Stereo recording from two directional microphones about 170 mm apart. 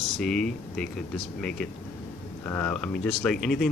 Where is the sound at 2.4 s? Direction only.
10° left (ahead or behind).